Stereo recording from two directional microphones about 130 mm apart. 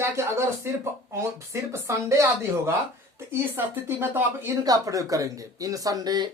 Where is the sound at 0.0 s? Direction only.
20° right (ahead or behind).